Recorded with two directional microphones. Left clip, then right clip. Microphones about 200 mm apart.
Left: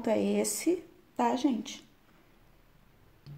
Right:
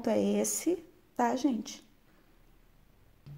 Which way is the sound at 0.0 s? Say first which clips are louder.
Left 1 dB; 15° right (ahead or behind).